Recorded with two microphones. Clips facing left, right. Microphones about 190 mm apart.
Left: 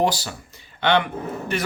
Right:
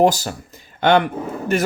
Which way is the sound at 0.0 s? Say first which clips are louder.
Right 6 dB; 45° right (ahead or behind).